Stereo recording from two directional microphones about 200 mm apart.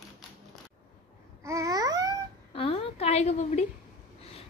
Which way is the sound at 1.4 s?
15° right (ahead or behind).